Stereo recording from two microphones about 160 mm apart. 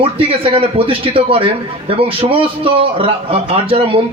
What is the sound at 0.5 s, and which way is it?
Speech, 35° right (ahead or behind).